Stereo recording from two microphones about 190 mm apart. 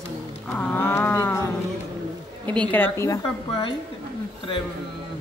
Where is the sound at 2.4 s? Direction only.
10° left (ahead or behind).